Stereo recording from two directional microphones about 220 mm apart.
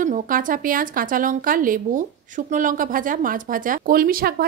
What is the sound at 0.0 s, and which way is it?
Speech, 35° right (ahead or behind).